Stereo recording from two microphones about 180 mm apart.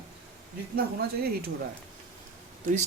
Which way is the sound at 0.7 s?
55° right (ahead or behind).